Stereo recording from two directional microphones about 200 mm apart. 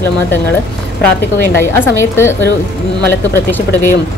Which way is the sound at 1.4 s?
10° left (ahead or behind).